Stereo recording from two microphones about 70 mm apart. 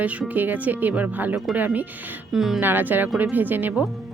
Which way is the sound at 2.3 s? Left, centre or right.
Centre.